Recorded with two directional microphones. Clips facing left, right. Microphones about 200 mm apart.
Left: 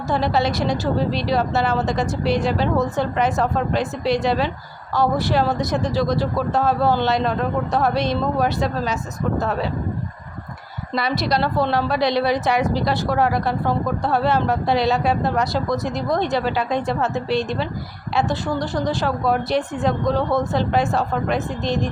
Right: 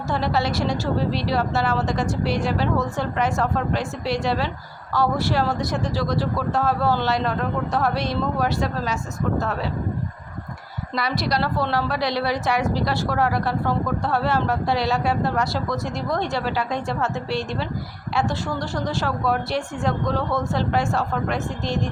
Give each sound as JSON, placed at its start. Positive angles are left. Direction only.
{"t": 0.1, "sound": "a woman's voice", "side_deg": 20}
{"t": 10.9, "sound": "a woman's voice", "side_deg": 25}